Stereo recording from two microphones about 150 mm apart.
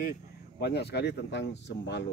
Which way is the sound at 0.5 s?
90° left.